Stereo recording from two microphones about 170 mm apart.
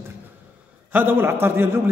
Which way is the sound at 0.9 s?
10° right (ahead or behind).